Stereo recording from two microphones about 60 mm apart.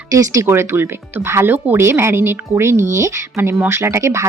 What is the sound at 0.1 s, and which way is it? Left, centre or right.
Speech, right.